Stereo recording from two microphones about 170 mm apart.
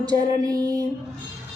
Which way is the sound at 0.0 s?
20° right (ahead or behind).